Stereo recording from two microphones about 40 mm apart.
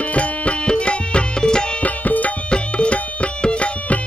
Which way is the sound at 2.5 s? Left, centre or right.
Left.